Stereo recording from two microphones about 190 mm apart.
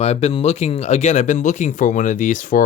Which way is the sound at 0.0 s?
35° left (ahead or behind).